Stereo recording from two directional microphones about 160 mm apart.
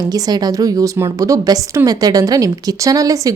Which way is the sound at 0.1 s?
25° right (ahead or behind).